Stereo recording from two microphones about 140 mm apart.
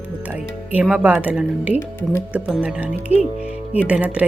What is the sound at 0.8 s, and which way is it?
Speech, 5° right (ahead or behind).